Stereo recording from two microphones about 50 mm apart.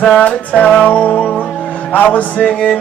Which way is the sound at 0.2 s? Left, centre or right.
Left.